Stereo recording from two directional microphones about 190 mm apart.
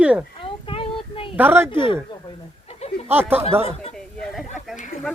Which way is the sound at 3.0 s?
10° right (ahead or behind).